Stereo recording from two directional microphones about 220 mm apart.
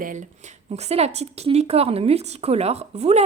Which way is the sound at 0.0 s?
35° right (ahead or behind).